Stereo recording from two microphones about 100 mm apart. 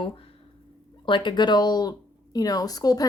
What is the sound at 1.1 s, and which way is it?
Speech, 55° left (ahead or behind).